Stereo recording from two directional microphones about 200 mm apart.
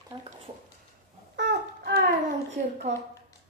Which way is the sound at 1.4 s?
55° right (ahead or behind).